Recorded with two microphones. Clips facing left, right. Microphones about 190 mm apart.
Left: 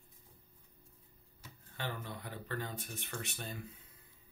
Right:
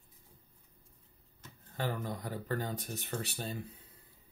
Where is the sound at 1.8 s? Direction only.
40° right (ahead or behind).